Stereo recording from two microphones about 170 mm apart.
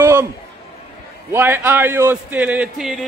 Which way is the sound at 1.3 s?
15° right (ahead or behind).